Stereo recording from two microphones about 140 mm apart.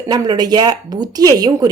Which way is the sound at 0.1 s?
30° right (ahead or behind).